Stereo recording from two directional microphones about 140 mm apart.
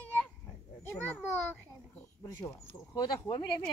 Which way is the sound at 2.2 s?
20° left (ahead or behind).